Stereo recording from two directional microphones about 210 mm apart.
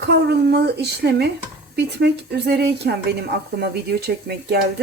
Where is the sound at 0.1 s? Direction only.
50° right (ahead or behind).